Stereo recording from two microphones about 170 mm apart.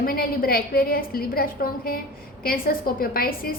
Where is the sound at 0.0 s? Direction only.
60° left (ahead or behind).